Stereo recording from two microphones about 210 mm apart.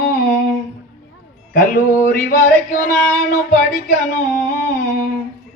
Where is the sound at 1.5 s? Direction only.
40° left (ahead or behind).